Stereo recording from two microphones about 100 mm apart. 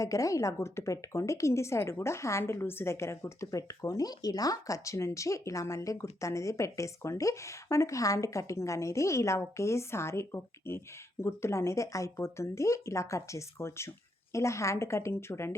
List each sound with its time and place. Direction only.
0.0 s a woman's voice: 35° left (ahead or behind)